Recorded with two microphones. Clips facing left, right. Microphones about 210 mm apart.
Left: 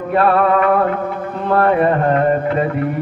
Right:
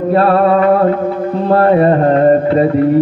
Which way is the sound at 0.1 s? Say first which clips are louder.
Right 3 dB; 35° right (ahead or behind).